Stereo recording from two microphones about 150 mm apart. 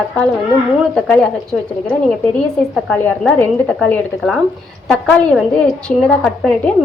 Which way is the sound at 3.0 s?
10° left (ahead or behind).